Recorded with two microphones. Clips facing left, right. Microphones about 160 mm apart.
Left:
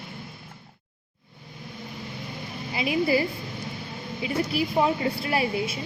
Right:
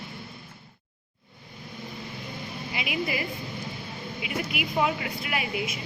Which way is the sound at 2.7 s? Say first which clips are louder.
Left 7 dB; 30° left (ahead or behind).